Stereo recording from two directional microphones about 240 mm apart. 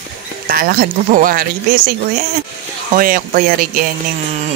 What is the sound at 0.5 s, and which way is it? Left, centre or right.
Speech, right.